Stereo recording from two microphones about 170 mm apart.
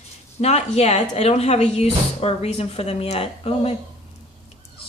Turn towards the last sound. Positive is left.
turn(degrees=35)  # may be behind; listen again after turning